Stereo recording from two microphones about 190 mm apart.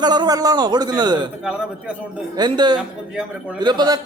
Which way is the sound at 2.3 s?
20° right (ahead or behind).